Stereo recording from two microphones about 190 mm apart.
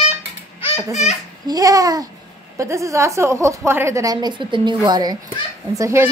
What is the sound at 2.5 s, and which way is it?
A woman's voice, 15° right (ahead or behind).